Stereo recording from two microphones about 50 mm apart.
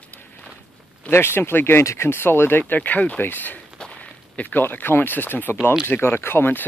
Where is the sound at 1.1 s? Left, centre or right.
Left.